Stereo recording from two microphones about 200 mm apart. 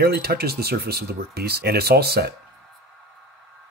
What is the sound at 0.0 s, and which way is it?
Speech, 50° right (ahead or behind).